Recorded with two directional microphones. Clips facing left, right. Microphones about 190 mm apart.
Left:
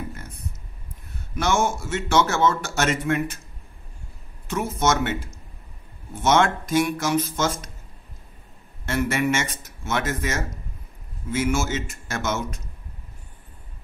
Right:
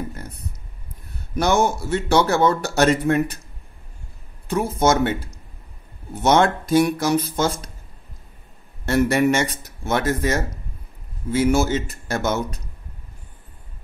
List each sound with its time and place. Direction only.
1.3 s a man's voice: 35° right (ahead or behind)
4.5 s a man's voice: 35° right (ahead or behind)
8.8 s a man's voice: 40° right (ahead or behind)